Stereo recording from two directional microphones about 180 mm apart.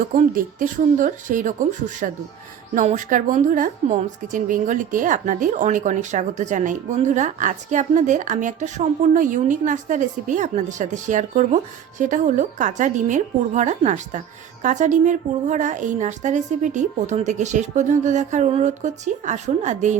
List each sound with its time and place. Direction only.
0.2 s a woman's voice: 45° right (ahead or behind)